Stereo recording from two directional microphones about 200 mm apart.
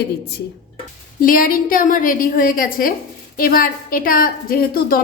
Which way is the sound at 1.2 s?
45° left (ahead or behind).